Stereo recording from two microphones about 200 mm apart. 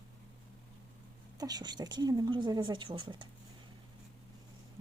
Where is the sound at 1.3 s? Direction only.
20° right (ahead or behind).